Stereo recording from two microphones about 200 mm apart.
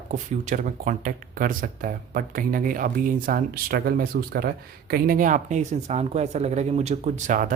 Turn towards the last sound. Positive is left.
turn(degrees=-40)  # may be behind; listen again after turning